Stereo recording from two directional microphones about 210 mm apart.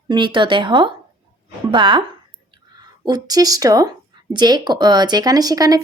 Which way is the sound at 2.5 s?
20° right (ahead or behind).